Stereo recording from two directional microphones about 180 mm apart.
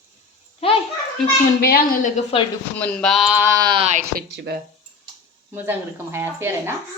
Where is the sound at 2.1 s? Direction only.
30° left (ahead or behind).